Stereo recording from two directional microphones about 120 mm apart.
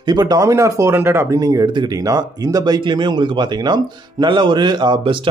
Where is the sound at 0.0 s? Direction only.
35° right (ahead or behind).